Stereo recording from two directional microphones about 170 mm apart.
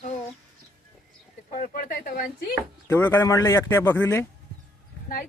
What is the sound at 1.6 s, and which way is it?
Speech, 55° left (ahead or behind).